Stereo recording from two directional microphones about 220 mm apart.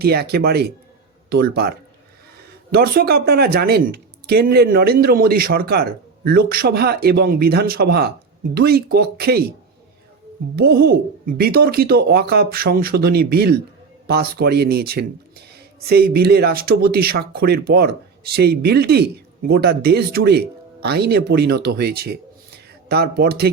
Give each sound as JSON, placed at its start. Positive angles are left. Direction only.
{"t": 0.0, "sound": "speech", "side_deg": -45}
{"t": 2.7, "sound": "speech", "side_deg": -45}
{"t": 10.5, "sound": "speech", "side_deg": -45}